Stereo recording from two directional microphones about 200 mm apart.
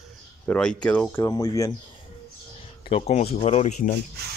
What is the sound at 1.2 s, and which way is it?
Speech, 15° left (ahead or behind).